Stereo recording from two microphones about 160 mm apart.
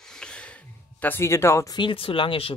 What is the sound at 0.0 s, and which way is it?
Speech, 5° left (ahead or behind).